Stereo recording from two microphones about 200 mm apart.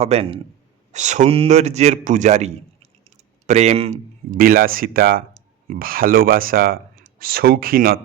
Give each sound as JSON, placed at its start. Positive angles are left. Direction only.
{"t": 0.0, "sound": "a man's voice", "side_deg": -30}
{"t": 4.4, "sound": "speech", "side_deg": -45}